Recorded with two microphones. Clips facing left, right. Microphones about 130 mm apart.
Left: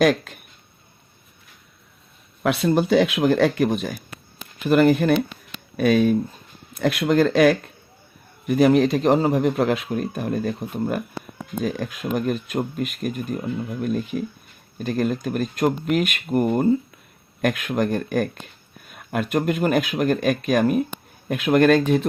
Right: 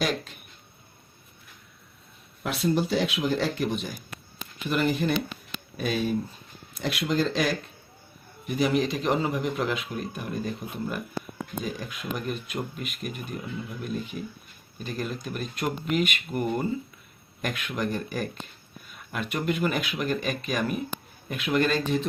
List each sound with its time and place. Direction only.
0.0 s speech: 50° left (ahead or behind)
2.4 s speech: 65° left (ahead or behind)